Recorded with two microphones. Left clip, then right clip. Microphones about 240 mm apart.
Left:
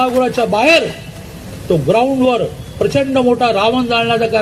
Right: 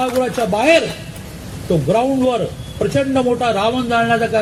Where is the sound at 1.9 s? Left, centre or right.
Left.